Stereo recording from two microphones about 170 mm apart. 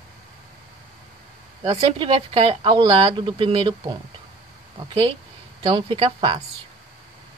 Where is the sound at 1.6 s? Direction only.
35° right (ahead or behind).